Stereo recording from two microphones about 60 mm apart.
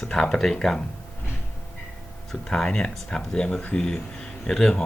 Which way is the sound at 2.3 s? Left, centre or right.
Centre.